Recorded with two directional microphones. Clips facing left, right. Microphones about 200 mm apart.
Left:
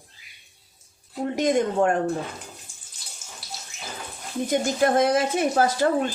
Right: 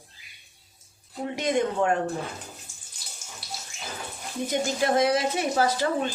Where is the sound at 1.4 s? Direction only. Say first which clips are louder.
Left 3 dB; 45° left (ahead or behind).